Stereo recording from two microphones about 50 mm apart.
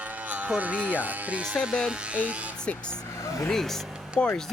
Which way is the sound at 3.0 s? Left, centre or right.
Left.